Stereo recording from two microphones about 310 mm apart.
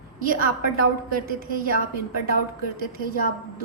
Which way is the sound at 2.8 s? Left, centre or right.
Right.